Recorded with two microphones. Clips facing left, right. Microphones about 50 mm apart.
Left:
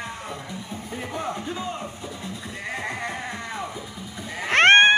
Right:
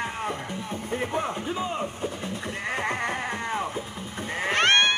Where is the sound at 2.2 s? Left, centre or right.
Right.